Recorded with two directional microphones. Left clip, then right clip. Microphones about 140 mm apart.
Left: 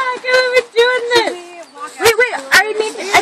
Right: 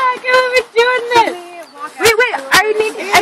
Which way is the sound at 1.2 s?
Centre (ahead or behind).